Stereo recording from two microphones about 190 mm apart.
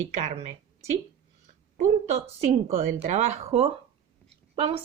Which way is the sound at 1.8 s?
35° right (ahead or behind).